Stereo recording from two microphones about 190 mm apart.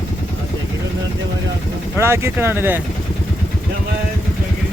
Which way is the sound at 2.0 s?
15° right (ahead or behind).